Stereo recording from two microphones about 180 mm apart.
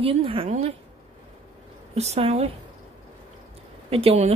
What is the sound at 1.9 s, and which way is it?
Speech, 35° right (ahead or behind).